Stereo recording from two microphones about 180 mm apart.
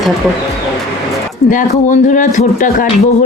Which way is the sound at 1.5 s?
45° left (ahead or behind).